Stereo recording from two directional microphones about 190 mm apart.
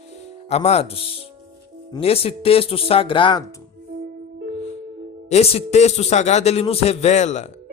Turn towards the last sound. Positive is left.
turn(degrees=40)  # may be behind; listen again after turning